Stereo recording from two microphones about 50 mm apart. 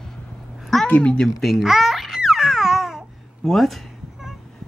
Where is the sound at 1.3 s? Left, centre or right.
Centre.